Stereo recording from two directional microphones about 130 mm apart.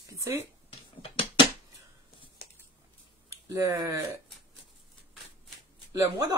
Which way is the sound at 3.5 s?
25° right (ahead or behind).